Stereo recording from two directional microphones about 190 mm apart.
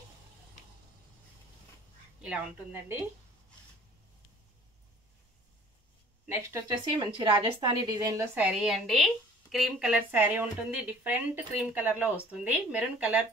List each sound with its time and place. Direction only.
2.2 s speech: 10° right (ahead or behind)
6.2 s speech: 15° right (ahead or behind)
8.4 s a woman's voice: 5° right (ahead or behind)